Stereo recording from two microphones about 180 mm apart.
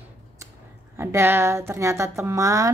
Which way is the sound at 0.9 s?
15° right (ahead or behind).